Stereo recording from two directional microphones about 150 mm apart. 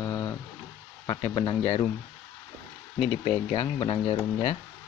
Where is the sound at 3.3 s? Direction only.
35° left (ahead or behind).